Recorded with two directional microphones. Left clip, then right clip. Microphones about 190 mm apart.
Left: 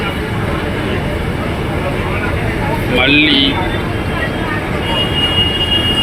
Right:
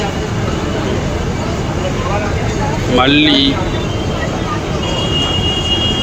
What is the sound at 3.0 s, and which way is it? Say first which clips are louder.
Speech: even; 15° right (ahead or behind).